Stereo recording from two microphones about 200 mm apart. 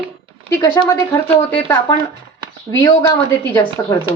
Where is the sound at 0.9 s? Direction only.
10° left (ahead or behind).